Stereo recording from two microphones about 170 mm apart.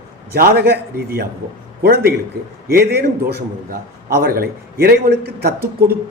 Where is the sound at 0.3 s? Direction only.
65° right (ahead or behind).